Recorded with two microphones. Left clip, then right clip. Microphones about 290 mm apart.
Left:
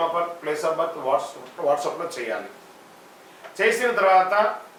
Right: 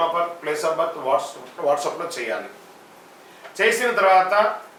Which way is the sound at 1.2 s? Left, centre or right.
Left.